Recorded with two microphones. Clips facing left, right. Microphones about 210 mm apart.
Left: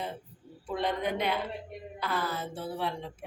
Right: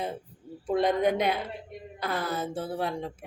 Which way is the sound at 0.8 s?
45° right (ahead or behind).